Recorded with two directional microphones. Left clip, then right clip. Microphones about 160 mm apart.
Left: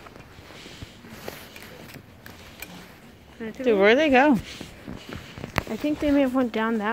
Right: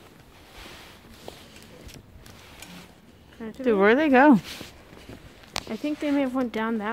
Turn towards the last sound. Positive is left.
turn(degrees=-5)  # may be behind; listen again after turning